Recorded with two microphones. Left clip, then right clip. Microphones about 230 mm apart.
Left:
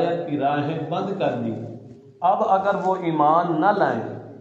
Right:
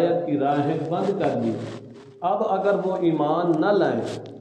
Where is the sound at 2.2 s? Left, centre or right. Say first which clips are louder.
Left 3 dB; left.